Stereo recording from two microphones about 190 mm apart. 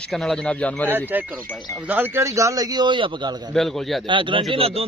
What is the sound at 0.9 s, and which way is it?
A man's voice, 10° right (ahead or behind).